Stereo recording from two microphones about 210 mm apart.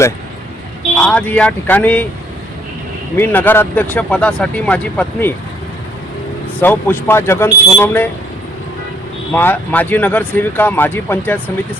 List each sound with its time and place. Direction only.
0.9 s speech: 5° left (ahead or behind)
3.2 s speech: 10° left (ahead or behind)
6.6 s speech: 10° left (ahead or behind)
9.3 s speech: 10° left (ahead or behind)